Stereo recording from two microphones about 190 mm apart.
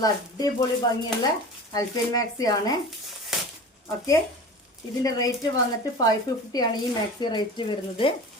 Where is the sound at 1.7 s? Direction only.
20° left (ahead or behind).